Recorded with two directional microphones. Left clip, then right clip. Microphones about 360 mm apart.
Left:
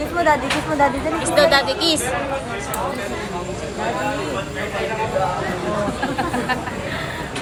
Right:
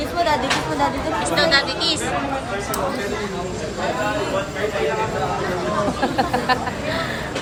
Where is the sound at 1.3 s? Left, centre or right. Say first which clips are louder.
Left 3 dB; centre.